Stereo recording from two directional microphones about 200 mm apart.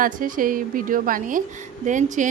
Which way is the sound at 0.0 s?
45° right (ahead or behind).